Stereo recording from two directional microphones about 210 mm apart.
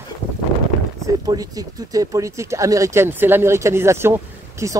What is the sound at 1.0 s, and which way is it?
Speech, 15° right (ahead or behind).